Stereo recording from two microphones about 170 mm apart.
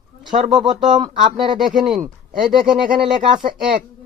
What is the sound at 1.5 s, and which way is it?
Speech, 25° right (ahead or behind).